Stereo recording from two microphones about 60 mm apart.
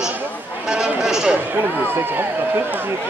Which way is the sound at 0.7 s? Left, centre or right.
Centre.